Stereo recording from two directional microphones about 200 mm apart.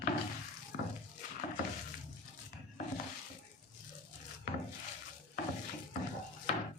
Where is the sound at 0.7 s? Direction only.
45° left (ahead or behind).